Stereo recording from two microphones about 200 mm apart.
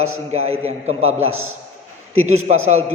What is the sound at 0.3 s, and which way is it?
Speech, 30° right (ahead or behind).